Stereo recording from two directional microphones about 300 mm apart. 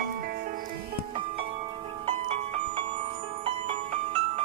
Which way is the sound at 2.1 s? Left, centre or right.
Centre.